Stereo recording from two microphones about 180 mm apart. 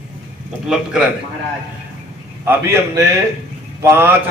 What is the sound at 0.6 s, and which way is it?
Speech, 5° right (ahead or behind).